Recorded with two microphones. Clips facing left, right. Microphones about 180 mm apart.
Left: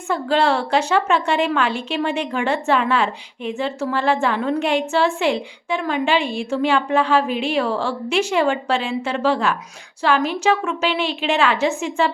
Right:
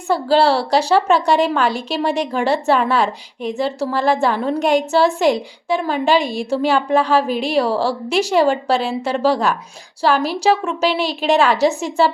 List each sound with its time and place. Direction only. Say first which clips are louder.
0.1 s a woman's voice: right 4 dB; 35° right (ahead or behind)